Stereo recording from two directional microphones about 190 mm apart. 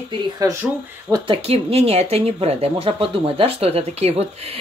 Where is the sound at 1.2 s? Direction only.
30° right (ahead or behind).